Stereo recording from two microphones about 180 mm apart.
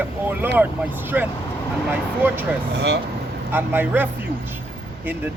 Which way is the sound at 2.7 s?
70° right (ahead or behind).